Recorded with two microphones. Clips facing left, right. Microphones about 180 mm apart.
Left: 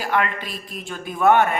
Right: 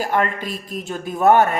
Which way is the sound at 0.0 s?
45° right (ahead or behind).